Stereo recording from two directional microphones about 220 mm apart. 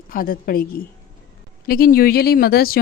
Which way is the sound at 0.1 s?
40° left (ahead or behind).